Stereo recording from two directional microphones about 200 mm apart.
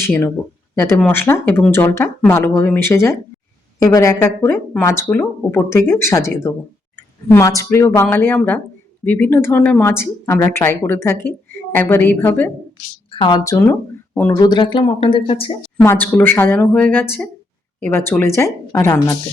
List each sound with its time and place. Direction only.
0.0 s speech: 10° left (ahead or behind)
13.1 s speech: 25° left (ahead or behind)
14.3 s speech: 20° left (ahead or behind)
15.8 s speech: 10° left (ahead or behind)